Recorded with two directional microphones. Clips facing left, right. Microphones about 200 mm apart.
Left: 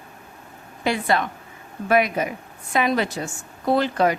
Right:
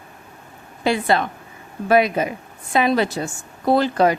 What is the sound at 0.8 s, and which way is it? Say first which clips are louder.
A woman's voice: right 3 dB; 30° right (ahead or behind).